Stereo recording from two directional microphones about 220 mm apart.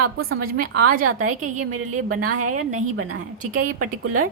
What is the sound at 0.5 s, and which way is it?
Speech, 45° right (ahead or behind).